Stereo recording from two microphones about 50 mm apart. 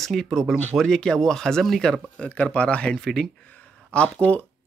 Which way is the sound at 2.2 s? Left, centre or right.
Left.